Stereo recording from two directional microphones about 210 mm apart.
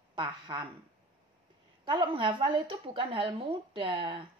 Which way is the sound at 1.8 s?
20° right (ahead or behind).